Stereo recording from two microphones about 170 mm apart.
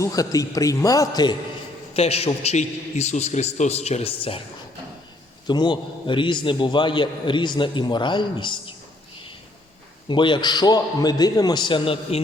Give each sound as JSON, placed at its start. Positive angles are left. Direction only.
{"t": 0.0, "sound": "a man's voice", "side_deg": 20}
{"t": 1.9, "sound": "a man's voice", "side_deg": 35}
{"t": 5.5, "sound": "a man's voice", "side_deg": 25}
{"t": 10.1, "sound": "a man's voice", "side_deg": 30}